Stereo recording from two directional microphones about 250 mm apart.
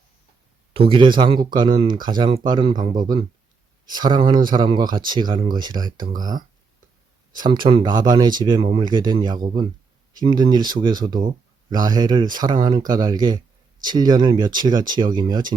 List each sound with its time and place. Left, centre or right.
0.7 s speech: right